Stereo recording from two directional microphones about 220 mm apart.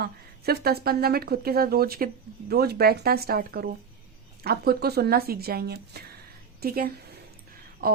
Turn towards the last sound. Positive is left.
turn(degrees=-45)  # may be behind; listen again after turning